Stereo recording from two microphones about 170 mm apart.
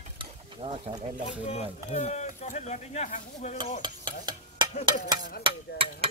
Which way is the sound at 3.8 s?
25° right (ahead or behind).